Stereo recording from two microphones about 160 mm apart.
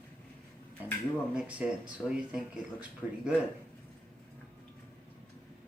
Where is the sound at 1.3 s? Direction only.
10° right (ahead or behind).